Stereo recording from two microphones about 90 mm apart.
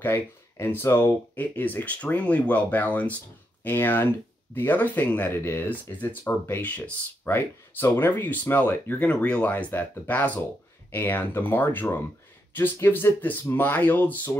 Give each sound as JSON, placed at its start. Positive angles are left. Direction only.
{"t": 0.0, "sound": "speech", "side_deg": 25}